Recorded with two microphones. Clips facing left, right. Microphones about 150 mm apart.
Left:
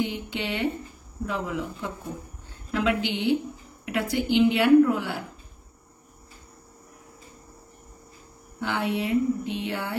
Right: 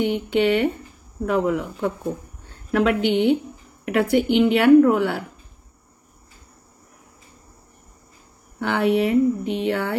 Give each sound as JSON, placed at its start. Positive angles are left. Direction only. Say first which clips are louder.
{"t": 0.0, "sound": "a woman's voice", "louder": "right 9 dB", "side_deg": -65}
{"t": 8.5, "sound": "speech", "louder": "right 8 dB", "side_deg": -65}